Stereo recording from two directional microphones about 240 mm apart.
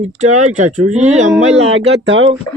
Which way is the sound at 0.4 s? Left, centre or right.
Right.